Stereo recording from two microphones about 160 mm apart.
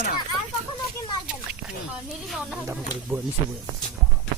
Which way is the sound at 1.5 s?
5° right (ahead or behind).